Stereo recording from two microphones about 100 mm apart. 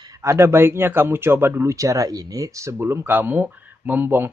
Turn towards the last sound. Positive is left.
turn(degrees=-20)  # may be behind; listen again after turning